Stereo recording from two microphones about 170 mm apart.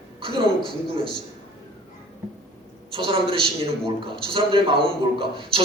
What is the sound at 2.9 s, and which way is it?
A man's voice, 30° right (ahead or behind).